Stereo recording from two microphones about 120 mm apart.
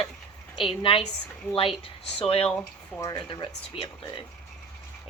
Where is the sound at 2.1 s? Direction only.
50° left (ahead or behind).